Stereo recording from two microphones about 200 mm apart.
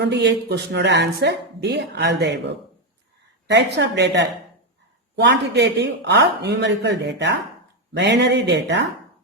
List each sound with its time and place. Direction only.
0.0 s a woman's voice: 60° right (ahead or behind)
3.4 s a woman's voice: 60° right (ahead or behind)